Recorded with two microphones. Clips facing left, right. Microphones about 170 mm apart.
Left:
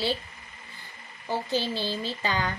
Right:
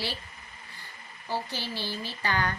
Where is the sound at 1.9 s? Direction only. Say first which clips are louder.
Left 3 dB; 20° left (ahead or behind).